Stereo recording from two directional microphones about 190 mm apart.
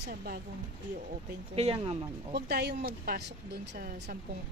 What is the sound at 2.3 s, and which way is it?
Speech, 60° right (ahead or behind).